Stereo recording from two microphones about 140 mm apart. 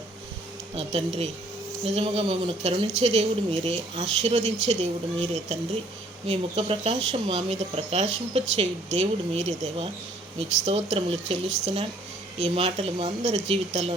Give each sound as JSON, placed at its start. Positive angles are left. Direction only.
{"t": 0.8, "sound": "speech", "side_deg": -50}